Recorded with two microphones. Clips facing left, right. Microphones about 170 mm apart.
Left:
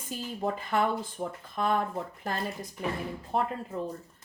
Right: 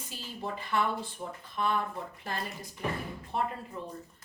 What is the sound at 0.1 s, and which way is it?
Speech, 45° left (ahead or behind).